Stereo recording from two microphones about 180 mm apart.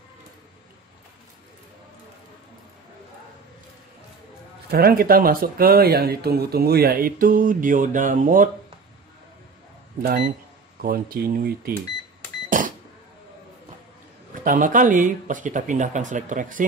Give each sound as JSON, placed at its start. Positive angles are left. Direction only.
{"t": 4.6, "sound": "speech", "side_deg": -60}
{"t": 10.0, "sound": "speech", "side_deg": -50}
{"t": 12.4, "sound": "power windows", "side_deg": -45}
{"t": 14.4, "sound": "speech", "side_deg": -45}